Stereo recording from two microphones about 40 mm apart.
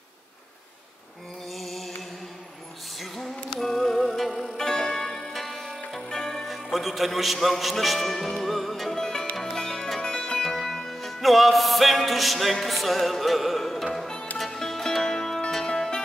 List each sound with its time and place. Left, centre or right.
1.5 s music: centre
3.5 s music: centre
4.6 s music: centre
6.4 s a man's voice: centre
9.4 s music: centre